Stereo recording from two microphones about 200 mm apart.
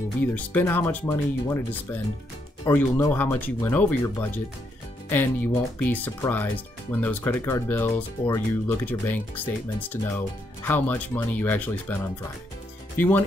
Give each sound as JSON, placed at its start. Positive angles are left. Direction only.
{"t": 0.3, "sound": "speech", "side_deg": 10}